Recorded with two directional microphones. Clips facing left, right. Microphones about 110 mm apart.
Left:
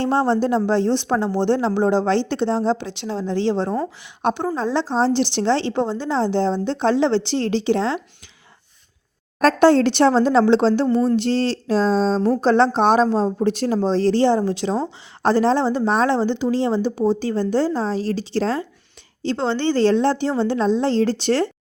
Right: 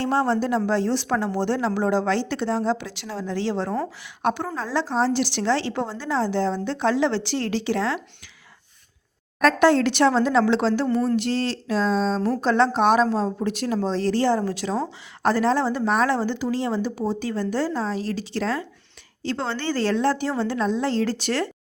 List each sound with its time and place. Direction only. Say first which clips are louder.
0.0 s speech: left 3 dB; 25° left (ahead or behind)
9.4 s speech: left 4 dB; 35° left (ahead or behind)